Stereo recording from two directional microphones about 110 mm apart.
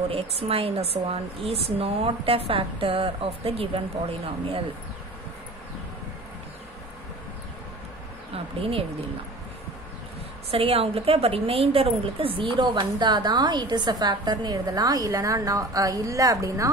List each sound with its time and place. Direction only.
0.1 s a woman's voice: 60° right (ahead or behind)
8.5 s a woman's voice: 60° right (ahead or behind)
10.5 s a woman's voice: 60° right (ahead or behind); by 16.7 s 30° right (ahead or behind)